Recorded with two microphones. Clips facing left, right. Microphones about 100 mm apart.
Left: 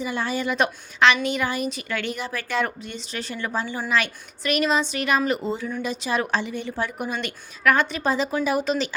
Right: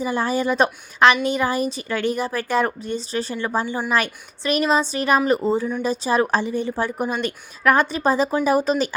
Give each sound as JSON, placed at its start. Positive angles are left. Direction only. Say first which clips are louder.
{"t": 0.0, "sound": "a woman's voice", "louder": "right 5 dB", "side_deg": -35}
{"t": 3.8, "sound": "a woman's voice", "louder": "right 2 dB", "side_deg": -45}